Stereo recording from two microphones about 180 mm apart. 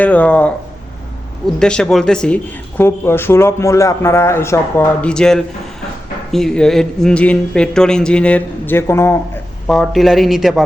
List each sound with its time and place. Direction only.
0.0 s speech: 10° left (ahead or behind)
1.5 s speech: 5° left (ahead or behind)
9.6 s speech: centre (ahead or behind)